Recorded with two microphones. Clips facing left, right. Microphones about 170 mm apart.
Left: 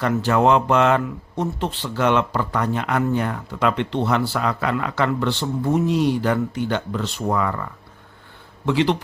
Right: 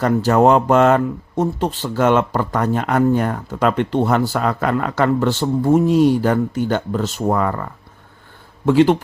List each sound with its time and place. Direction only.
0.0 s speech: 40° right (ahead or behind)